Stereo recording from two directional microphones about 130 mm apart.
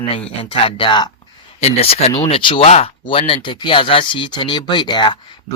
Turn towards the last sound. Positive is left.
turn(degrees=35)  # may be behind; listen again after turning